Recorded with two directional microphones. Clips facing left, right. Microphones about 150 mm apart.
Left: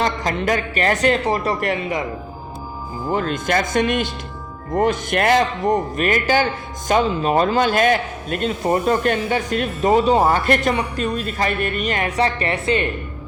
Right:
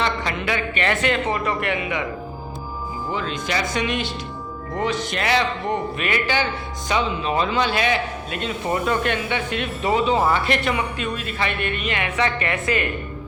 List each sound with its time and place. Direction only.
0.0 s a man's voice: 40° left (ahead or behind)
3.1 s a man's voice: 50° left (ahead or behind); by 12.9 s 30° left (ahead or behind)